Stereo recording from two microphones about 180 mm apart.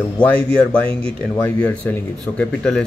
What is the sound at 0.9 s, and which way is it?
Speech, 30° right (ahead or behind).